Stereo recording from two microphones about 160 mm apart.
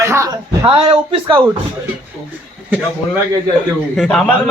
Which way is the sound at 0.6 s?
35° right (ahead or behind).